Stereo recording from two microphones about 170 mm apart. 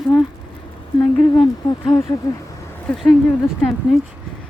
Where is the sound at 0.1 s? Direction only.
5° right (ahead or behind).